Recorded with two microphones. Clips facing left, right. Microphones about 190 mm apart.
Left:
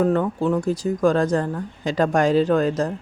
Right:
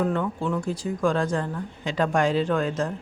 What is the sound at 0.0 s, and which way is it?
Speech, 40° left (ahead or behind).